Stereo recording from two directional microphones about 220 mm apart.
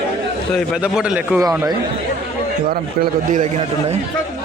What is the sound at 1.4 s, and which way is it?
Speech, 15° right (ahead or behind).